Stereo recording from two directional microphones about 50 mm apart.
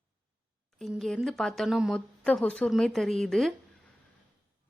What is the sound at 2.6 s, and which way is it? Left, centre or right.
Speech, centre.